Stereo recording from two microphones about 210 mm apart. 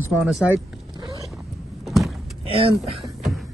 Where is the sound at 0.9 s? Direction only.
20° right (ahead or behind).